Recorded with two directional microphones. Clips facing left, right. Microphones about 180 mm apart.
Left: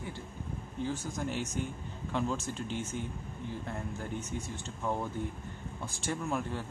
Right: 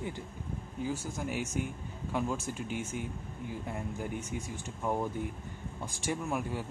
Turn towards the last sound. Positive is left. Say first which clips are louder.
# even
turn(degrees=-10)  # may be behind; listen again after turning